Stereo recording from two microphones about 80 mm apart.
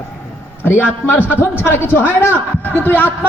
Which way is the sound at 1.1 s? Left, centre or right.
Left.